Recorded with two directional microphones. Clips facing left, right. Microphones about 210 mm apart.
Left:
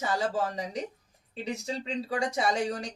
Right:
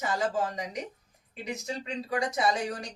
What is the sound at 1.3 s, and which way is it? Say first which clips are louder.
Speech: left 2 dB; 30° left (ahead or behind).